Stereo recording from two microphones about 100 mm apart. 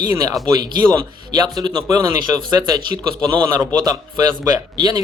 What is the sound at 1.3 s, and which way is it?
Speech, 45° right (ahead or behind).